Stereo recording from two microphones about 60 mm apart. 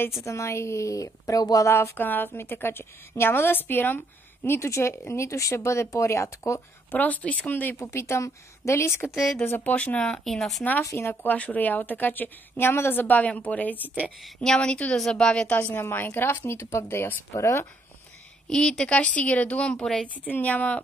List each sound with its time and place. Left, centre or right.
0.2 s a woman's voice: left
2.0 s a woman's voice: left
6.9 s a woman's voice: left
7.8 s a woman's voice: left
9.1 s speech: centre
9.6 s a woman's voice: left
9.9 s a woman's voice: centre
11.0 s a woman's voice: left
13.0 s a woman's voice: left
14.2 s a woman's voice: centre
15.7 s a woman's voice: left
18.5 s a woman's voice: centre
20.2 s a woman's voice: left